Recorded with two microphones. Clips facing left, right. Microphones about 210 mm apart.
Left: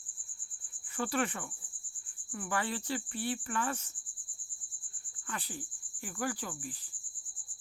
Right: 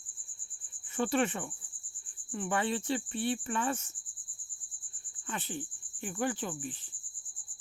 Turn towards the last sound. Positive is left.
turn(degrees=-25)  # may be behind; listen again after turning